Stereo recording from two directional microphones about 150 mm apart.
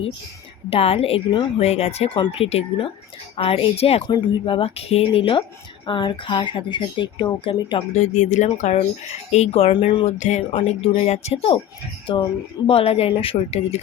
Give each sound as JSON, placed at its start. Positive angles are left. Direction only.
{"t": 0.7, "sound": "speech", "side_deg": 40}
{"t": 10.2, "sound": "speech", "side_deg": 50}